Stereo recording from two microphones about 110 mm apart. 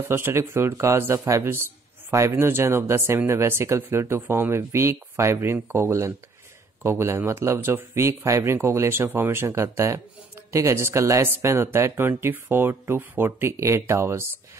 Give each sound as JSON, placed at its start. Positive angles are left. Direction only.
{"t": 0.1, "sound": "speech", "side_deg": -20}